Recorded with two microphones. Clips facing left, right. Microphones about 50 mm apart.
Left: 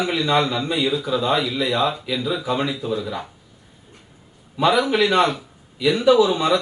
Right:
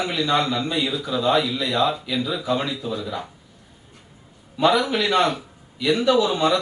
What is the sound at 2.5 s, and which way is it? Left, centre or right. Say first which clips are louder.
Speech: left 2 dB; left.